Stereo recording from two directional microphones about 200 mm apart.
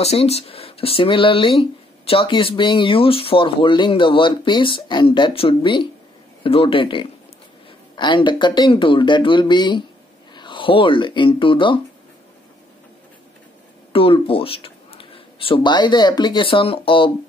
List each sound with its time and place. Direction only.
0.0 s speech: 30° left (ahead or behind)
13.9 s speech: 25° left (ahead or behind)